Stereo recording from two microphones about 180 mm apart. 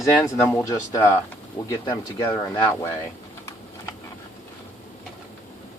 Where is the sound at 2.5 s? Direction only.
10° left (ahead or behind).